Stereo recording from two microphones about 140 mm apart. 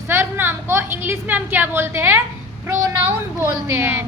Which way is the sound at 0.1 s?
15° right (ahead or behind).